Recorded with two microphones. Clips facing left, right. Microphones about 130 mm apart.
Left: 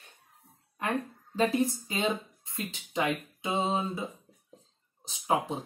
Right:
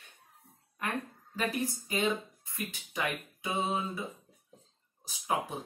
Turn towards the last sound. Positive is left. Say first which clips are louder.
# left 4 dB
turn(degrees=25)  # may be behind; listen again after turning